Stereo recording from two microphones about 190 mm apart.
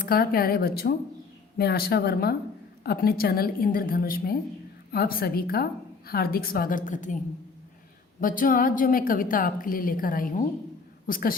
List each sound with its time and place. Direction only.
0.0 s a woman's voice: 50° left (ahead or behind)
8.2 s a woman's voice: 45° left (ahead or behind)